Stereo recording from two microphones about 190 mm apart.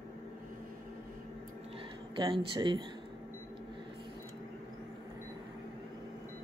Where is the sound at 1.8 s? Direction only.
25° right (ahead or behind).